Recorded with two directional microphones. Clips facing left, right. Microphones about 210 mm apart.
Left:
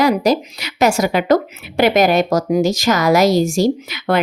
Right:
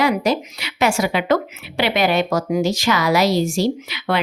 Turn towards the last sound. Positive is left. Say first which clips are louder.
# left 4 dB
turn(degrees=45)  # may be behind; listen again after turning